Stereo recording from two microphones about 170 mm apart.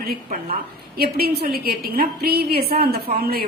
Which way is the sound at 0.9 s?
65° right (ahead or behind).